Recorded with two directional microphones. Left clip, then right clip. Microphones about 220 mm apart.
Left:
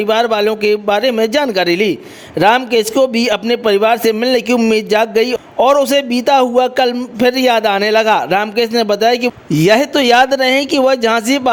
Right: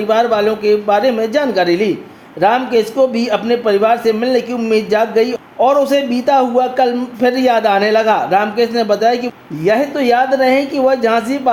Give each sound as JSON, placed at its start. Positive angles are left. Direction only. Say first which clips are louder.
{"t": 0.1, "sound": "a man's voice", "louder": "right 1 dB", "side_deg": 40}